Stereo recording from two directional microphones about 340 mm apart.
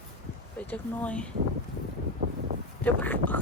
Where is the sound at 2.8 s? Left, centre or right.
Centre.